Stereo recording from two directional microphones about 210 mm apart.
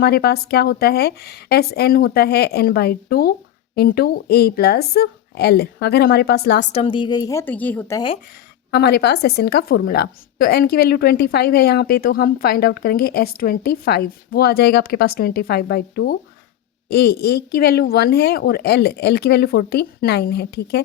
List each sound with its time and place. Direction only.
0.0 s a woman's voice: 50° left (ahead or behind)
6.7 s a woman's voice: 25° left (ahead or behind)
8.7 s a woman's voice: 50° left (ahead or behind)